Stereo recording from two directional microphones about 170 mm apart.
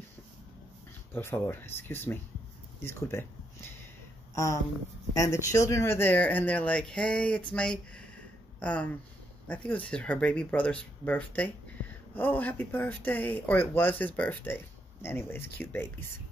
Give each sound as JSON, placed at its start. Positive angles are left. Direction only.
{"t": 1.1, "sound": "speech", "side_deg": 10}
{"t": 5.1, "sound": "speech", "side_deg": 20}